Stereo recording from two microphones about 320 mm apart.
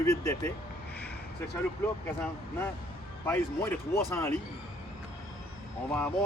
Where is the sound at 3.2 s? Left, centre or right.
Centre.